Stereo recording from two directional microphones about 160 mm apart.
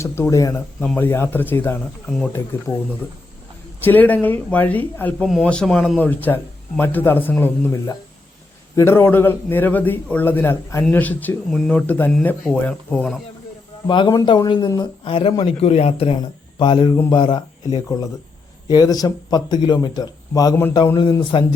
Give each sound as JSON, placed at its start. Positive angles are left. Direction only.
{"t": 0.0, "sound": "speech", "side_deg": 20}
{"t": 2.0, "sound": "speech", "side_deg": 0}
{"t": 3.8, "sound": "speech", "side_deg": 10}
{"t": 13.8, "sound": "a man's voice", "side_deg": 30}